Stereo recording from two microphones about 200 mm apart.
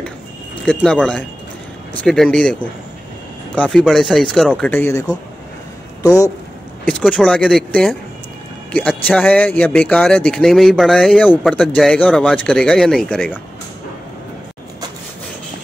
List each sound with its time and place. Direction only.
0.7 s speech: 5° left (ahead or behind)
6.8 s speech: 5° left (ahead or behind)